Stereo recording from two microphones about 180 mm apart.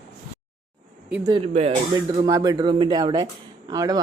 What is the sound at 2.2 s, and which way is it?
Speech, 20° right (ahead or behind).